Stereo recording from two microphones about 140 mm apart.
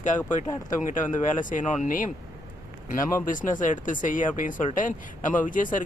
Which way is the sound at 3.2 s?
70° left (ahead or behind).